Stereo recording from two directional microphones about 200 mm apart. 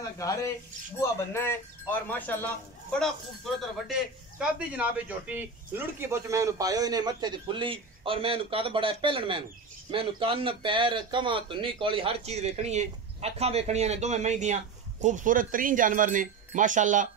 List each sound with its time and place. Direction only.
0.2 s speech: 15° left (ahead or behind)
4.4 s a man's voice: 5° right (ahead or behind); by 17.1 s 40° right (ahead or behind)